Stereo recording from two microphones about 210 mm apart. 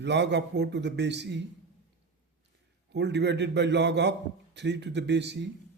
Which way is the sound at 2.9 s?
55° right (ahead or behind).